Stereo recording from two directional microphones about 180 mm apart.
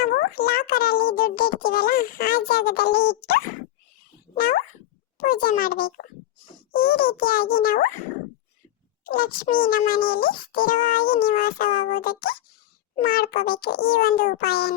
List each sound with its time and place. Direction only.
0.0 s a child's voice: 55° left (ahead or behind)
9.0 s a child's voice: 55° left (ahead or behind)